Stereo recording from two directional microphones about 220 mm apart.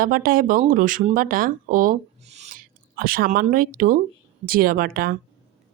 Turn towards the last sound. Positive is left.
turn(degrees=-40)  # may be behind; listen again after turning